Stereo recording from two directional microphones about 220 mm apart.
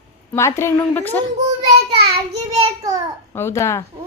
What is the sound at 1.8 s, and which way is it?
Child singing, 50° right (ahead or behind).